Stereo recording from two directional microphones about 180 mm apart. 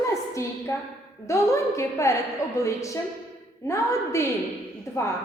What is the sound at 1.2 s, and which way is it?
A woman's voice, 15° left (ahead or behind).